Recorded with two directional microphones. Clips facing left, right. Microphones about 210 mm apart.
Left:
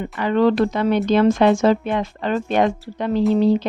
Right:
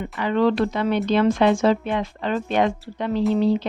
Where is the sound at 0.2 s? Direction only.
45° left (ahead or behind).